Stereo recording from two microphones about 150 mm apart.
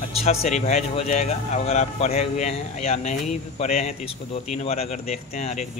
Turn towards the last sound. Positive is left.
turn(degrees=45)  # may be behind; listen again after turning